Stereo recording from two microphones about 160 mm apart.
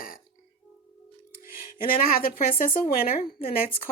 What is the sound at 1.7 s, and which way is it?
Speech, 65° left (ahead or behind).